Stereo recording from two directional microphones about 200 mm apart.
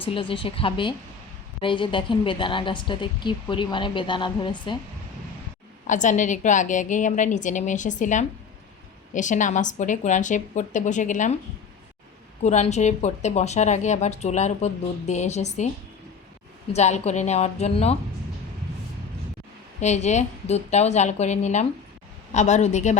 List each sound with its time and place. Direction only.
0.0 s speech: 25° left (ahead or behind)
5.9 s speech: 40° left (ahead or behind)
12.4 s speech: 35° left (ahead or behind)
16.7 s speech: 35° left (ahead or behind)
19.8 s speech: 35° left (ahead or behind)